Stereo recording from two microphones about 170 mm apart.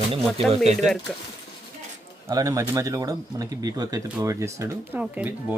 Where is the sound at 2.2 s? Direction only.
20° right (ahead or behind).